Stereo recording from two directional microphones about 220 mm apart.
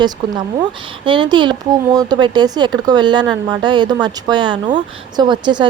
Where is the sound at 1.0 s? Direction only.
20° right (ahead or behind).